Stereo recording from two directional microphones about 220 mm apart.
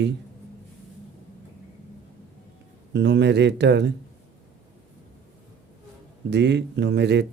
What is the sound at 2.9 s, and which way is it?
Speech, 50° right (ahead or behind).